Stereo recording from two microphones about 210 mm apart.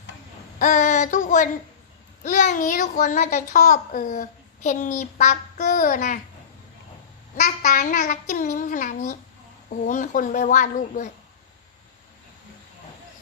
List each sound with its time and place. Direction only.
0.6 s a child's voice: 35° left (ahead or behind)
7.4 s a child's voice: 35° left (ahead or behind)